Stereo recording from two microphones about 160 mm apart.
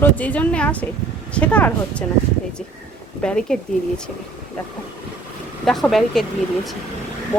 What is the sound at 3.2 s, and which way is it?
Speech, 5° left (ahead or behind).